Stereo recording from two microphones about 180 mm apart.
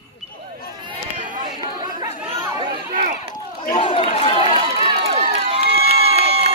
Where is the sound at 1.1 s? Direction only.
45° right (ahead or behind).